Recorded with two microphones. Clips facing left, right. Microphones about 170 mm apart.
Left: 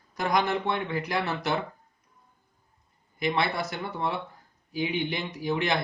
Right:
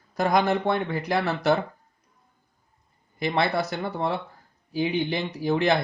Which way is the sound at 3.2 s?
30° right (ahead or behind).